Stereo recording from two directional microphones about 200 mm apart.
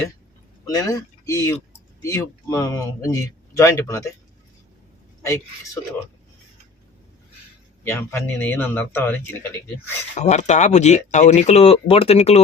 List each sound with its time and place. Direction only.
0.7 s speech: 15° left (ahead or behind)
7.9 s speech: 10° left (ahead or behind)
10.2 s speech: 35° left (ahead or behind)